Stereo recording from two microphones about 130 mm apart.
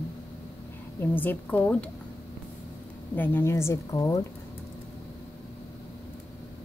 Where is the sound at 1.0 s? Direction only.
15° left (ahead or behind).